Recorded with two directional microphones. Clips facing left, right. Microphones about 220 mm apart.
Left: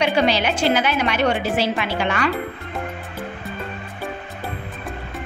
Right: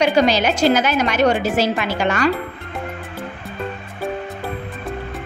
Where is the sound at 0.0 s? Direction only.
40° right (ahead or behind).